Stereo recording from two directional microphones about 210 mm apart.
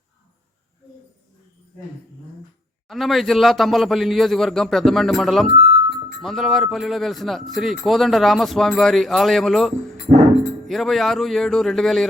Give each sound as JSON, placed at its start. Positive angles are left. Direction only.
{"t": 2.9, "sound": "a man's voice", "side_deg": 0}
{"t": 10.1, "sound": "speech", "side_deg": -30}
{"t": 10.7, "sound": "a man's voice", "side_deg": 0}